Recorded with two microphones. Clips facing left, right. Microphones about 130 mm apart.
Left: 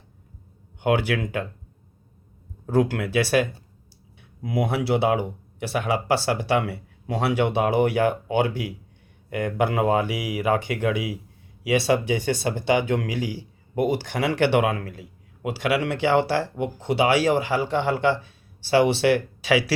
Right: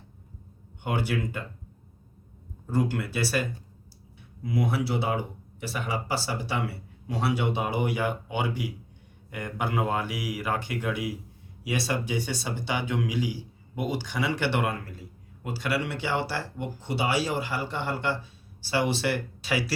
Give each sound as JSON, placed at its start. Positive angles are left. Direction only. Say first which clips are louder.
{"t": 0.8, "sound": "speech", "louder": "left 7 dB", "side_deg": 75}
{"t": 2.6, "sound": "speech", "louder": "left 6 dB", "side_deg": 80}
{"t": 4.4, "sound": "speech", "louder": "left 4 dB", "side_deg": 65}
{"t": 10.1, "sound": "speech", "louder": "left 4 dB", "side_deg": 0}
{"t": 10.3, "sound": "speech", "louder": "left 9 dB", "side_deg": 60}